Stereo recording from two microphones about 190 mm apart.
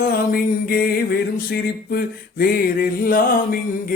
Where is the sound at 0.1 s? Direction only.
50° left (ahead or behind).